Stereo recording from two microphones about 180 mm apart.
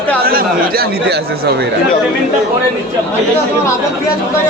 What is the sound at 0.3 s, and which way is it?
Speech, 55° right (ahead or behind).